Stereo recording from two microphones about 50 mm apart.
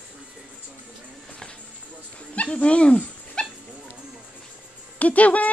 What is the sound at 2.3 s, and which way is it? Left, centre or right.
Dog, left.